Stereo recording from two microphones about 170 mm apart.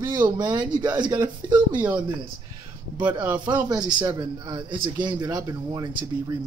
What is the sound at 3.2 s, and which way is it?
Speech, 25° right (ahead or behind).